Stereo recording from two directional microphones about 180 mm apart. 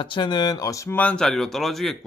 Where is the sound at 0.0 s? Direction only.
25° left (ahead or behind).